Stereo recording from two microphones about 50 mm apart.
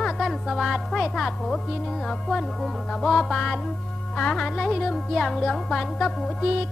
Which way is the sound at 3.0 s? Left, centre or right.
Centre.